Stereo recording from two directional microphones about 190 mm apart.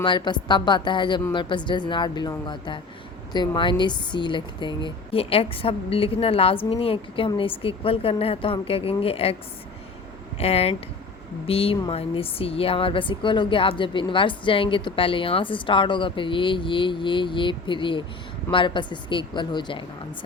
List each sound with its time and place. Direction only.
0.0 s a woman's voice: 25° left (ahead or behind)
10.3 s a woman's voice: 30° left (ahead or behind)